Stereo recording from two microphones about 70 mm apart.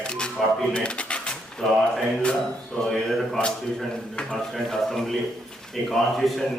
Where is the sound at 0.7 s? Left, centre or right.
Centre.